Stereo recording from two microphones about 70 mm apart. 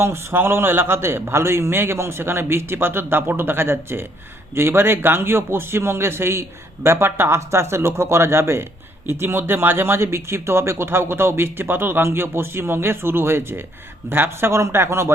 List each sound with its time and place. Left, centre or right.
0.0 s speech: right